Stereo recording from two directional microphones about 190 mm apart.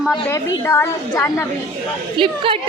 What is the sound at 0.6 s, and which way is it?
Speech, 15° left (ahead or behind).